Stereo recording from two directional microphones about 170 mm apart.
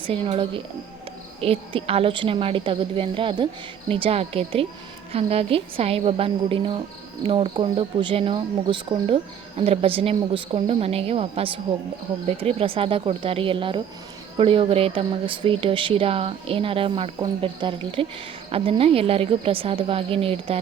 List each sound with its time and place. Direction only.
0.0 s speech: 30° right (ahead or behind)